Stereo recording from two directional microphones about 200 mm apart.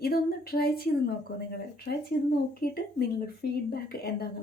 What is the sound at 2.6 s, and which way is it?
Speech, 50° left (ahead or behind).